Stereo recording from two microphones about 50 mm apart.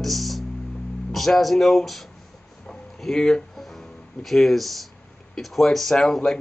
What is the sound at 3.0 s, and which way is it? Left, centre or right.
Music, centre.